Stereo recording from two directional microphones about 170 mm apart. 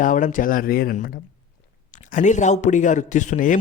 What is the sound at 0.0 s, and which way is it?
Speech, 50° left (ahead or behind).